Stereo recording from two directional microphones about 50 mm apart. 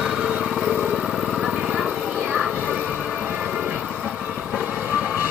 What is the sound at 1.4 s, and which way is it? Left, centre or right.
Vehicle, centre.